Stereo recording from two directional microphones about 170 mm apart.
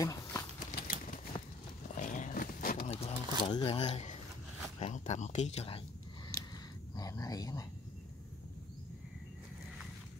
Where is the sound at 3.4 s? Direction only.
30° left (ahead or behind).